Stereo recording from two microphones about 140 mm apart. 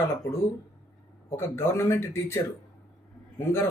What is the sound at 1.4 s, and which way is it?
Speech, 15° left (ahead or behind).